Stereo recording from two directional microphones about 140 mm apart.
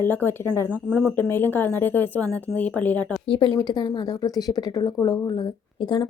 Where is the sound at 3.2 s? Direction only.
35° left (ahead or behind).